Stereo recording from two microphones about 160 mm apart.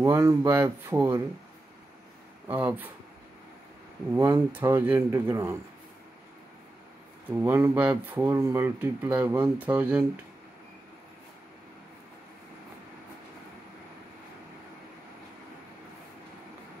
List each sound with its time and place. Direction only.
0.0 s speech: 20° right (ahead or behind)
2.4 s speech: 10° right (ahead or behind)
4.1 s speech: 15° right (ahead or behind)
7.4 s speech: 15° right (ahead or behind)